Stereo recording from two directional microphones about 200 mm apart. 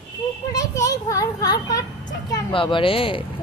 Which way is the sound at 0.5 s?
15° left (ahead or behind).